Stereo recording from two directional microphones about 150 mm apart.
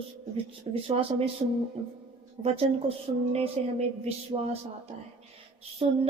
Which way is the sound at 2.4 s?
40° right (ahead or behind).